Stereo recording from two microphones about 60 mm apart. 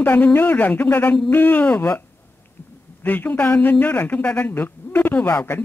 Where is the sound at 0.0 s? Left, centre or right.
Left.